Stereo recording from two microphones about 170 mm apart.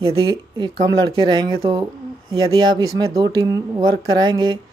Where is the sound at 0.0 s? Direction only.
25° right (ahead or behind).